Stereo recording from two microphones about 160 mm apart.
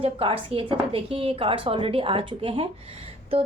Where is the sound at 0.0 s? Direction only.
35° right (ahead or behind).